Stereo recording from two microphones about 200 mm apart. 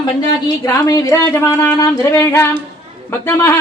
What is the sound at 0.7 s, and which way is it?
Speech, 15° left (ahead or behind).